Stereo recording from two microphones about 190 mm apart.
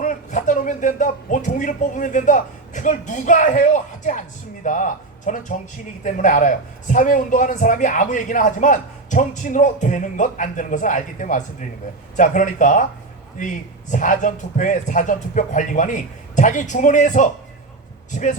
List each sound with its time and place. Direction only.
0.0 s a man's voice: 45° left (ahead or behind)